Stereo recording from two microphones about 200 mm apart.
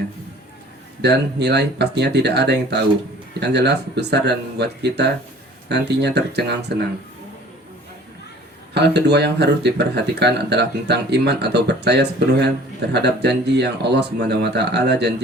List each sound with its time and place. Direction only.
1.0 s speech: 55° right (ahead or behind)
8.7 s speech: 55° right (ahead or behind)